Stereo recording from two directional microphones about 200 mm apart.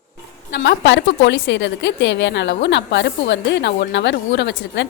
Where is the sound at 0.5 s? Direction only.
60° left (ahead or behind).